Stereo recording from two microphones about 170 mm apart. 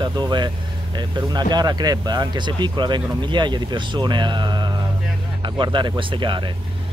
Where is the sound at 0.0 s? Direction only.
25° right (ahead or behind).